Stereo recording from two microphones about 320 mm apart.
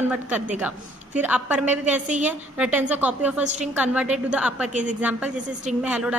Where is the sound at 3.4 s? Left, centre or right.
Right.